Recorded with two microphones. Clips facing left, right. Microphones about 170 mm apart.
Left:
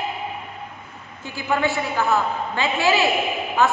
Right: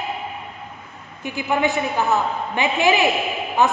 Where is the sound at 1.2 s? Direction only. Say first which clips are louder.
Right 2 dB; 15° right (ahead or behind).